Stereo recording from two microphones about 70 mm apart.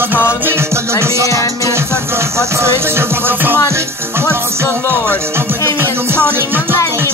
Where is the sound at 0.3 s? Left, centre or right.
Right.